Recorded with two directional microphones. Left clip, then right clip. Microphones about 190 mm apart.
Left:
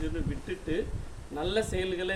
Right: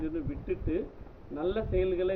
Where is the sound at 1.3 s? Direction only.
35° left (ahead or behind).